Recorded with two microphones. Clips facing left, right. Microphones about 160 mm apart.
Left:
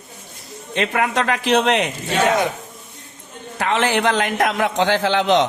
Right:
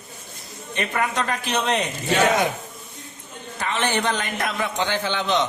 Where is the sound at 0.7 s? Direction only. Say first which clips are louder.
Left 5 dB; 75° left (ahead or behind); by 1.9 s 90° left.